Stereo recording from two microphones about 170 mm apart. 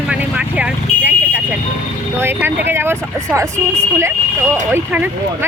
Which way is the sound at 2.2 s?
15° right (ahead or behind).